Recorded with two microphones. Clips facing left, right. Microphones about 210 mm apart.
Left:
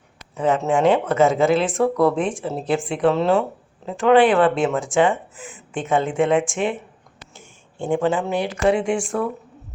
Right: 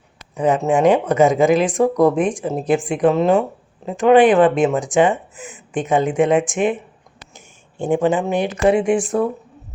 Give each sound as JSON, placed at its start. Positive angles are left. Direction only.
{"t": 0.3, "sound": "speech", "side_deg": -15}